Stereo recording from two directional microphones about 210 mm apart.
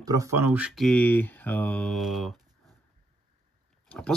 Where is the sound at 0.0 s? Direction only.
15° right (ahead or behind).